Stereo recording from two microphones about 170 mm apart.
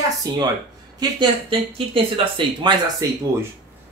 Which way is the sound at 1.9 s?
30° right (ahead or behind).